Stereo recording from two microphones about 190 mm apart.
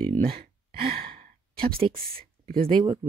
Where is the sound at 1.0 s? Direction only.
50° right (ahead or behind).